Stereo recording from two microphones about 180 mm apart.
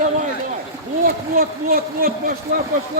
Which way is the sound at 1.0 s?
55° right (ahead or behind).